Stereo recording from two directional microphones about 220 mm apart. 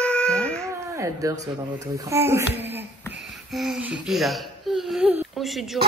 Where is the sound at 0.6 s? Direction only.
15° right (ahead or behind).